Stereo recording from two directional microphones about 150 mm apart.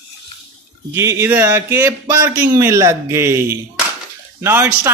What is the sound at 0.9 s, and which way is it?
A man's voice, 20° right (ahead or behind).